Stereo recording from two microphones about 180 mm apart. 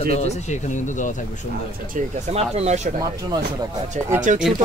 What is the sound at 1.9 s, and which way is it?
Speech, 35° right (ahead or behind).